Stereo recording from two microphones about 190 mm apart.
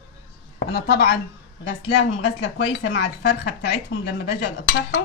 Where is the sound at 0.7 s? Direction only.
55° left (ahead or behind).